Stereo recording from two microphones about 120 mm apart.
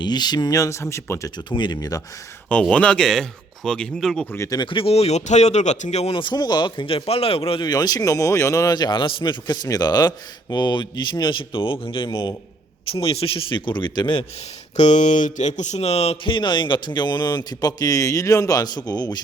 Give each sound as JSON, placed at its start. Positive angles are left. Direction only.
{"t": 0.0, "sound": "speech", "side_deg": 35}
{"t": 1.5, "sound": "speech", "side_deg": 40}
{"t": 2.5, "sound": "speech", "side_deg": 10}
{"t": 4.4, "sound": "speech", "side_deg": 30}
{"t": 4.7, "sound": "speech", "side_deg": 55}
{"t": 6.1, "sound": "speech", "side_deg": 35}
{"t": 7.7, "sound": "speech", "side_deg": 35}
{"t": 14.8, "sound": "speech", "side_deg": 80}